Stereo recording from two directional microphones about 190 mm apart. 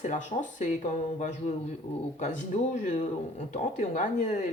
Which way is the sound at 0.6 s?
40° left (ahead or behind).